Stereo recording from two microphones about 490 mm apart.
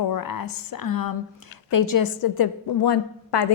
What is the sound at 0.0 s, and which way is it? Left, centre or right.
A woman's voice, left.